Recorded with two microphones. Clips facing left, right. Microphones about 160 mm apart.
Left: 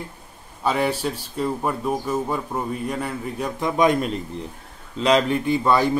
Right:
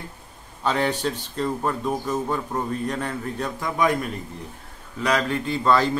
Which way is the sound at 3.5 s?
20° left (ahead or behind).